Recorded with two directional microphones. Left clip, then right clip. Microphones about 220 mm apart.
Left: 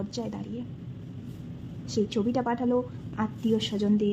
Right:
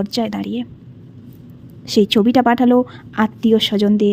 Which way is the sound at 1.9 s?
40° right (ahead or behind).